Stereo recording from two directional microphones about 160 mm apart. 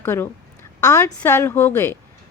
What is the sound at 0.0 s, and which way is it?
A woman's voice, 15° left (ahead or behind).